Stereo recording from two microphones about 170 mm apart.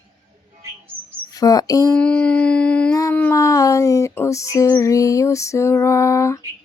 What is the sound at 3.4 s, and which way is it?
Female singing, 20° left (ahead or behind).